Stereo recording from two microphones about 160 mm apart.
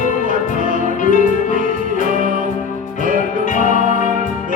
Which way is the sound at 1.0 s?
55° left (ahead or behind).